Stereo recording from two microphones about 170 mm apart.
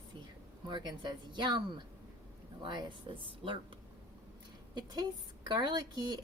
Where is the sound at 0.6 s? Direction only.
25° right (ahead or behind).